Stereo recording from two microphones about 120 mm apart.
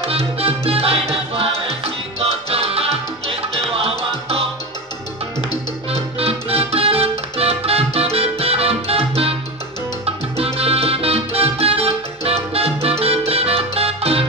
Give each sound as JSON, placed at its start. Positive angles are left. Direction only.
{"t": 0.0, "sound": "music", "side_deg": -55}
{"t": 5.9, "sound": "music", "side_deg": -55}